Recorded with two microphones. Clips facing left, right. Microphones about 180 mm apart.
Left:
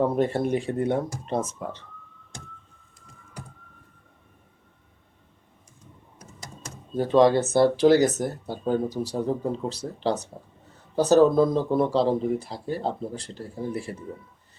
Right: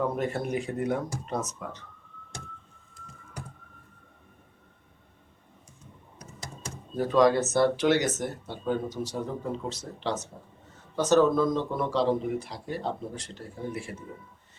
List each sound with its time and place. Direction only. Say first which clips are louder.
0.0 s speech: left 6 dB; 30° left (ahead or behind)
6.9 s speech: left 3 dB; 25° left (ahead or behind)